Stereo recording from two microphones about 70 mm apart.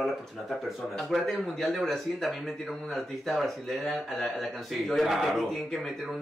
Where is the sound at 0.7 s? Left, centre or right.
Centre.